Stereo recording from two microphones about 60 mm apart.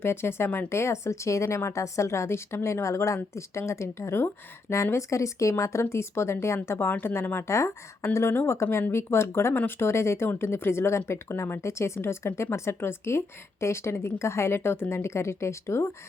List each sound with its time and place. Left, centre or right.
0.0 s speech: left